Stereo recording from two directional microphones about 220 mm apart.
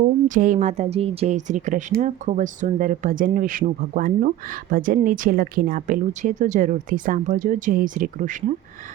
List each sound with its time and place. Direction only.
0.3 s speech: 35° right (ahead or behind)